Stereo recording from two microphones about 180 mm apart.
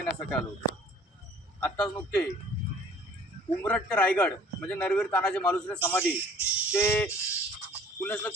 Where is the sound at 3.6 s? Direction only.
10° left (ahead or behind).